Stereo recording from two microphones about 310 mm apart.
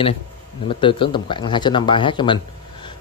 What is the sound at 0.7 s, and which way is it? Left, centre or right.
Speech, centre.